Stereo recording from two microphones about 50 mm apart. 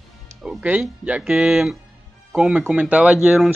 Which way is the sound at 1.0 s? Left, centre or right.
Right.